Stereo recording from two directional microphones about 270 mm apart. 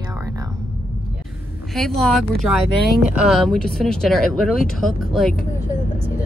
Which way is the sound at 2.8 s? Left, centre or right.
Left.